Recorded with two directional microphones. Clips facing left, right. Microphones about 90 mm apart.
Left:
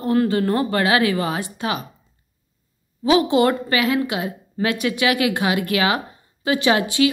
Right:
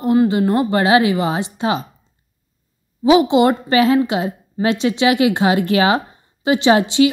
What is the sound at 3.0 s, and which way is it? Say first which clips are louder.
Speech: right 4 dB; 20° right (ahead or behind).